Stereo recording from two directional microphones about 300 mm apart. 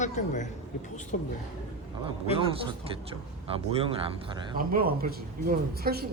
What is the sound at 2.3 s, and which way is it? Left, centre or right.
Speech, centre.